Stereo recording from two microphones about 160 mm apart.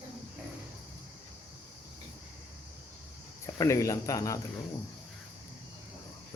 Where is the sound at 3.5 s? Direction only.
20° left (ahead or behind).